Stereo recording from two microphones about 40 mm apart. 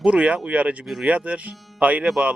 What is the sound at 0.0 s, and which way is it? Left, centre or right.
A man's voice, right.